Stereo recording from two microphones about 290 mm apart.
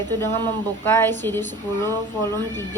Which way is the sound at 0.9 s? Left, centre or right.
Centre.